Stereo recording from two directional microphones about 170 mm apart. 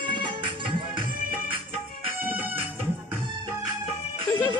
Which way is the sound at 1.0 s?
55° right (ahead or behind).